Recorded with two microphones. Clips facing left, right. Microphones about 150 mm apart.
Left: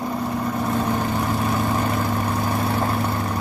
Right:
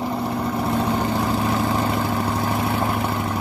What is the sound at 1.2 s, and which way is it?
Vehicle, 20° right (ahead or behind).